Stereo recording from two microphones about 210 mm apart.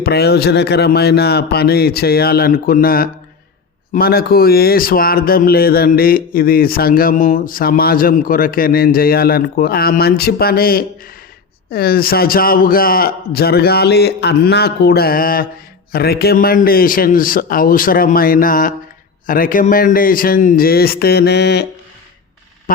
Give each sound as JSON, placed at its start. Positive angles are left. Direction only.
{"t": 0.0, "sound": "speech", "side_deg": 50}